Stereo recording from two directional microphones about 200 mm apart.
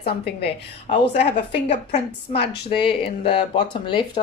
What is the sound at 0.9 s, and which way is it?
A woman's voice, 40° left (ahead or behind).